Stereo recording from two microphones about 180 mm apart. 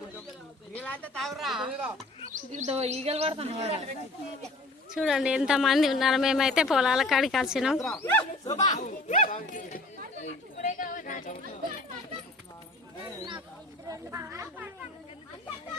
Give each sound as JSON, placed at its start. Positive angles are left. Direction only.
{"t": 0.8, "sound": "a woman's voice", "side_deg": 10}
{"t": 2.3, "sound": "speech", "side_deg": -45}
{"t": 4.9, "sound": "speech", "side_deg": -5}
{"t": 8.4, "sound": "speech", "side_deg": 20}
{"t": 8.7, "sound": "speech", "side_deg": 45}
{"t": 10.2, "sound": "chatter", "side_deg": 40}
{"t": 13.8, "sound": "speech", "side_deg": -15}